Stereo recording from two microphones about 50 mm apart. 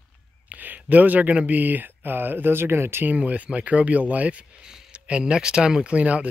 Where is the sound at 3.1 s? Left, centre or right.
Right.